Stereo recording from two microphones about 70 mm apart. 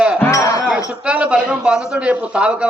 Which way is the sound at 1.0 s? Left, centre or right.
Centre.